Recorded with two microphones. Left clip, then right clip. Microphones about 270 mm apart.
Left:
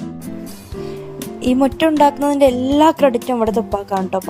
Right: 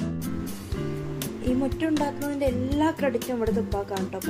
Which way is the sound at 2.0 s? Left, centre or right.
Left.